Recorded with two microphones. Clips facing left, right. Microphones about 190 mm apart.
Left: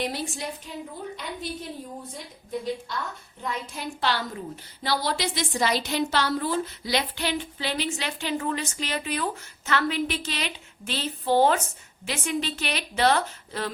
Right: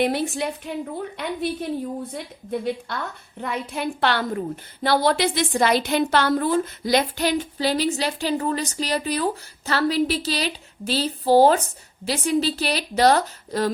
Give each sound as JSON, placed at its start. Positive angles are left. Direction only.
{"t": 0.0, "sound": "a woman's voice", "side_deg": -60}